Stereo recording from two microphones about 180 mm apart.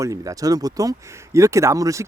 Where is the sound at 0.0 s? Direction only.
20° right (ahead or behind).